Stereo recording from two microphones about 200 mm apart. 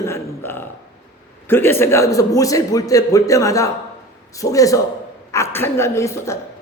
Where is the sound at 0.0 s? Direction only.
10° left (ahead or behind).